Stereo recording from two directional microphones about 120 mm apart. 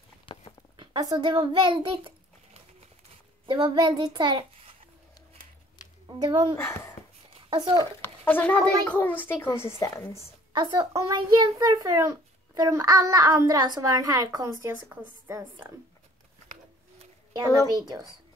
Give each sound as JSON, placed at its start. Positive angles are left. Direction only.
{"t": 0.3, "sound": "a sound", "side_deg": 45}
{"t": 0.7, "sound": "a child's voice", "side_deg": -40}
{"t": 6.0, "sound": "speech", "side_deg": -40}
{"t": 6.5, "sound": "speech", "side_deg": 20}
{"t": 7.4, "sound": "speech", "side_deg": -40}
{"t": 8.0, "sound": "speech", "side_deg": 15}
{"t": 10.5, "sound": "a child's voice", "side_deg": -40}
{"t": 17.7, "sound": "a child's voice", "side_deg": -35}